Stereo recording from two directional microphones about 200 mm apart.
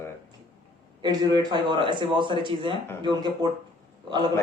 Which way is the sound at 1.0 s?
20° right (ahead or behind).